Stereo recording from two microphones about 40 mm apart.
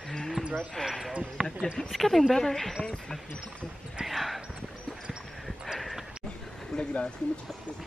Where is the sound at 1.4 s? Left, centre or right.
Right.